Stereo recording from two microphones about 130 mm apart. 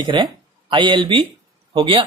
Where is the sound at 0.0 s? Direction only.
40° right (ahead or behind).